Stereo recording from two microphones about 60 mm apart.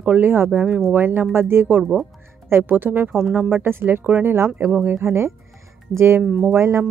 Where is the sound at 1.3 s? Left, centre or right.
Right.